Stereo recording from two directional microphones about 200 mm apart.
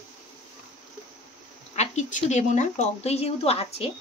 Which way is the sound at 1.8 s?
35° left (ahead or behind).